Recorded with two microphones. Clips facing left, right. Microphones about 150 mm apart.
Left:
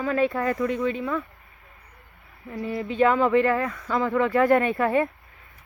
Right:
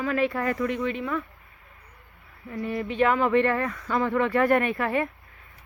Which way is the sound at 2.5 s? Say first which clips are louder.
Even; 25° left (ahead or behind).